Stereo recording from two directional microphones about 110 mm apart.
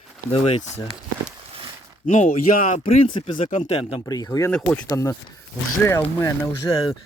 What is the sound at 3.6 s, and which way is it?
Speech, 70° left (ahead or behind).